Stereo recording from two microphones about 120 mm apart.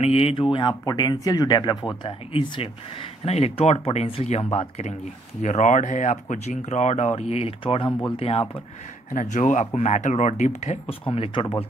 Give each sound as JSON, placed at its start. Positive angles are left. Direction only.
{"t": 0.0, "sound": "speech", "side_deg": 55}
{"t": 5.4, "sound": "speech", "side_deg": 85}
{"t": 9.1, "sound": "speech", "side_deg": 90}
{"t": 11.1, "sound": "speech", "side_deg": 50}